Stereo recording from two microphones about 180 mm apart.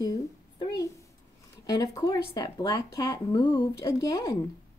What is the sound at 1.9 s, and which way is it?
Speech, 20° left (ahead or behind).